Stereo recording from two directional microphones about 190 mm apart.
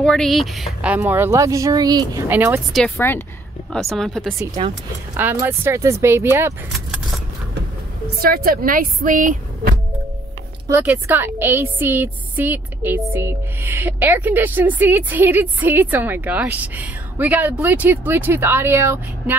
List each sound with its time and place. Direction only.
0.0 s a woman's voice: 5° left (ahead or behind)
2.7 s speech: 10° left (ahead or behind)
3.7 s speech: centre (ahead or behind)
5.1 s a woman's voice: 10° right (ahead or behind)
6.7 s keys jangling: centre (ahead or behind)
8.2 s a woman's voice: 50° right (ahead or behind)
10.7 s a woman's voice: 10° right (ahead or behind)